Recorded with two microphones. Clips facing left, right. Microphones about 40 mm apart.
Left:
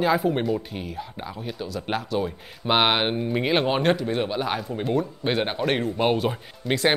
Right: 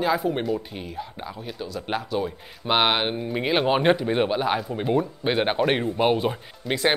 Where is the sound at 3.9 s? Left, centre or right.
Right.